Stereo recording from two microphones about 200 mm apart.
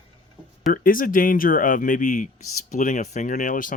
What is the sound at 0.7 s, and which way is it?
Speech, 45° left (ahead or behind).